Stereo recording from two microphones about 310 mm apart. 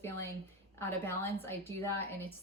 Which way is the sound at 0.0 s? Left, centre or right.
Centre.